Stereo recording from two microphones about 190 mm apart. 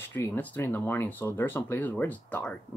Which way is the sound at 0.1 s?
10° left (ahead or behind).